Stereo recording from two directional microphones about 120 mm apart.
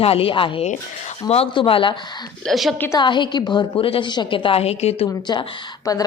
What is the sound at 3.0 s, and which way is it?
A woman's voice, 40° left (ahead or behind).